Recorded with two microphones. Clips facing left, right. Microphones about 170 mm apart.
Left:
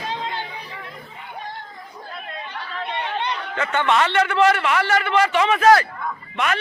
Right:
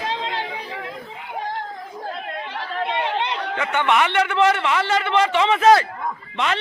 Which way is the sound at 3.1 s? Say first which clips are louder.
Right 2 dB; 90° right.